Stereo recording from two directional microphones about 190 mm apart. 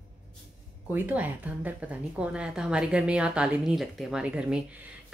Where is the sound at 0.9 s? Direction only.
10° right (ahead or behind).